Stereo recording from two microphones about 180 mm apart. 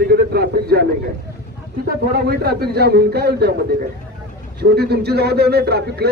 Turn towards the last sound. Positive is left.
turn(degrees=-60)  # may be behind; listen again after turning